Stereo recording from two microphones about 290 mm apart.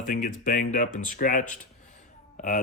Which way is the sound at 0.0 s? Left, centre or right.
Left.